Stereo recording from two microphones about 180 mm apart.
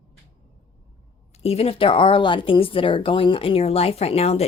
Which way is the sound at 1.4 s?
35° left (ahead or behind).